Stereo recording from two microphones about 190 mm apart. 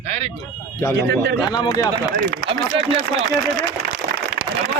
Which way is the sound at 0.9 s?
65° right (ahead or behind).